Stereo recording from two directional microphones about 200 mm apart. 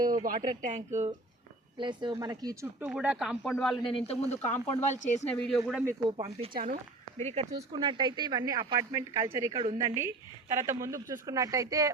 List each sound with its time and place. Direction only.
0.3 s speech: 40° right (ahead or behind)
1.8 s speech: 25° right (ahead or behind)
2.8 s speech: 5° right (ahead or behind)
3.8 s speech: 30° left (ahead or behind)
5.3 s speech: 5° left (ahead or behind)
5.8 s speech: 15° right (ahead or behind)
6.5 s speech: 45° right (ahead or behind)
7.2 s speech: 35° right (ahead or behind); by 11.9 s 15° right (ahead or behind)